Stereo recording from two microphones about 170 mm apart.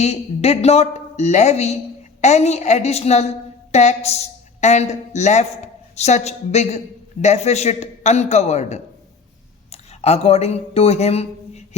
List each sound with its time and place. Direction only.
0.0 s a woman's voice: 40° left (ahead or behind)